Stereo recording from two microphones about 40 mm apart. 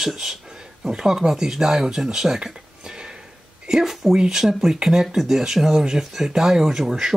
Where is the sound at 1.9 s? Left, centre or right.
Centre.